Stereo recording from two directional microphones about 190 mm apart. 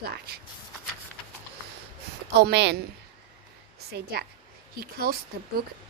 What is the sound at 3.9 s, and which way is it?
A woman's voice, 55° right (ahead or behind).